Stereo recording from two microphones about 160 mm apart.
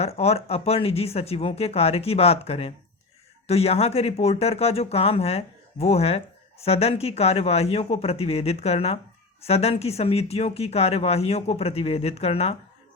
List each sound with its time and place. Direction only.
0.0 s speech: 40° left (ahead or behind)